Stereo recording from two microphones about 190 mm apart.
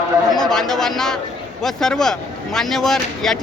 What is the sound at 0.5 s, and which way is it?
Speech, centre (ahead or behind).